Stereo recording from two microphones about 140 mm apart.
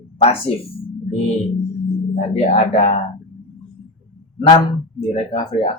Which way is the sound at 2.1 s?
45° left (ahead or behind).